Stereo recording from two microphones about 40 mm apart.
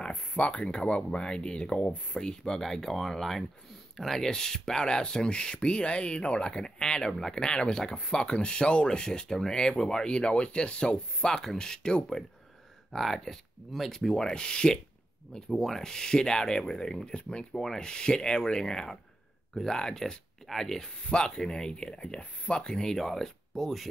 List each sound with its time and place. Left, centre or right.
0.1 s speech: left; by 2.6 s centre
2.6 s speech: centre
14.3 s speech: left
15.3 s speech: centre
21.0 s speech: left; by 23.9 s centre